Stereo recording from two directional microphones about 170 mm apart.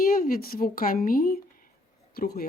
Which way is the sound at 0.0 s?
60° left (ahead or behind).